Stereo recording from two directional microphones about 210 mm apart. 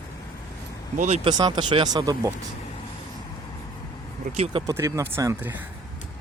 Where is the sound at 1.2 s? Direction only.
20° right (ahead or behind).